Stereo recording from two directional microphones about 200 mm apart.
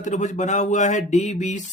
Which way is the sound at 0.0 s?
40° left (ahead or behind).